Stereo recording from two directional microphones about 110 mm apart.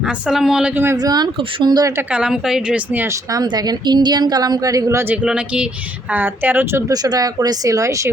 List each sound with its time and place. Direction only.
0.0 s speech: 5° right (ahead or behind)
0.9 s a woman's voice: 40° right (ahead or behind)
2.0 s speech: 5° right (ahead or behind)
3.4 s a woman's voice: 40° right (ahead or behind)
5.1 s speech: 10° right (ahead or behind)
6.9 s a woman's voice: 35° right (ahead or behind)